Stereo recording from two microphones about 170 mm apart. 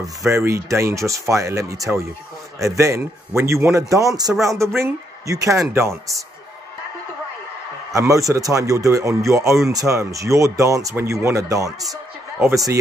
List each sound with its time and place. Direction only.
0.3 s speech: 15° right (ahead or behind)
7.9 s a man's voice: 20° right (ahead or behind)